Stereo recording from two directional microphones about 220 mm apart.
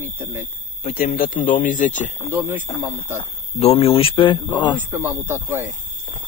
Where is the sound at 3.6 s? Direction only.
30° left (ahead or behind).